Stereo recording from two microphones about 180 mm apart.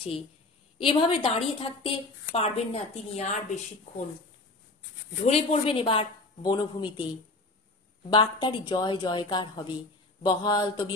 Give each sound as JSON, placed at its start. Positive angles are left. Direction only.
{"t": 0.7, "sound": "a woman's voice", "side_deg": 30}
{"t": 5.2, "sound": "speech", "side_deg": 35}